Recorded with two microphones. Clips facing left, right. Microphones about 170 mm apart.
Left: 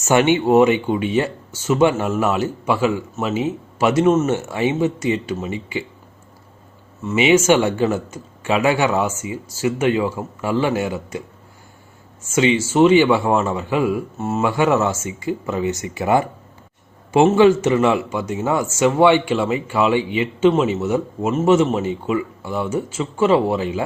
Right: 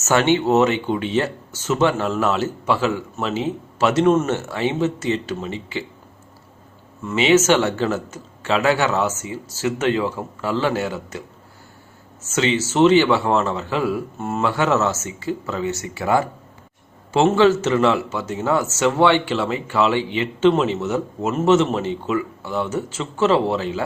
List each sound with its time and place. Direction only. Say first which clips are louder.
0.0 s speech: left 2 dB; 15° left (ahead or behind)
7.0 s speech: left 1 dB; 10° left (ahead or behind)
12.2 s speech: left 3 dB; 10° left (ahead or behind)